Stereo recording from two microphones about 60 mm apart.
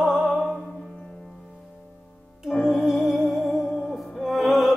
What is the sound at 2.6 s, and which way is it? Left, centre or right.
Music, centre.